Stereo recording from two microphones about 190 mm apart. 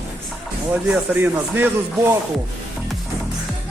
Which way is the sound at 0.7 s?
10° right (ahead or behind).